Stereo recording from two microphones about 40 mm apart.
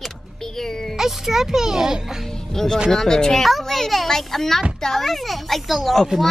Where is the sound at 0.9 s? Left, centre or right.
Centre.